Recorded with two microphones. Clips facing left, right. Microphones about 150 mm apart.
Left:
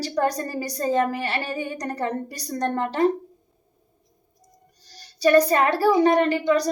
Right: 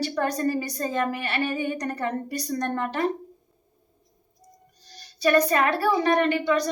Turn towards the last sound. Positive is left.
turn(degrees=35)  # may be behind; listen again after turning